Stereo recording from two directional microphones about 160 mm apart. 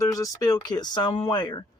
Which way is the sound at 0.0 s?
20° left (ahead or behind).